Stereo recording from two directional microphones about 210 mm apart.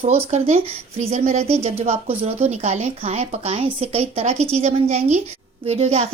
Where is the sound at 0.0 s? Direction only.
30° right (ahead or behind).